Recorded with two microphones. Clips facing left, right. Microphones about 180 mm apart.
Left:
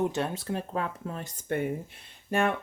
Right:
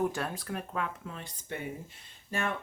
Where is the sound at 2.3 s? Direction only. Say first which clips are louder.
Left 7 dB; 60° left (ahead or behind).